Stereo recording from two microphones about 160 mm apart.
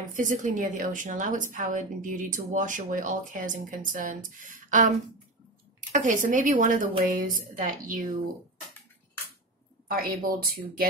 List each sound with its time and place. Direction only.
0.1 s a woman's voice: 55° right (ahead or behind)
9.8 s a woman's voice: 65° right (ahead or behind)